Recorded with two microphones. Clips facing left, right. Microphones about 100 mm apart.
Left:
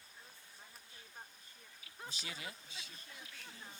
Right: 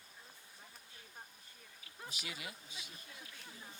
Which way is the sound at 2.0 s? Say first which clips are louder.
Even; 30° left (ahead or behind).